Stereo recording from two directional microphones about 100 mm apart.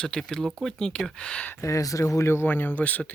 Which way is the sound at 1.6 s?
30° left (ahead or behind).